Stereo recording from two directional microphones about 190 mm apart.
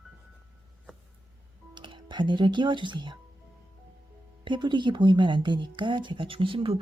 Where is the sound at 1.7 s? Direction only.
25° right (ahead or behind).